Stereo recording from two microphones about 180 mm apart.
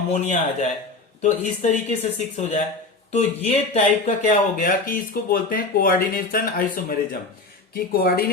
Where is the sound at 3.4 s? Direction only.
35° left (ahead or behind).